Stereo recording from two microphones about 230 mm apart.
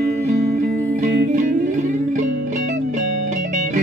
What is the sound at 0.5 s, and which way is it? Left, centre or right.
Music, right.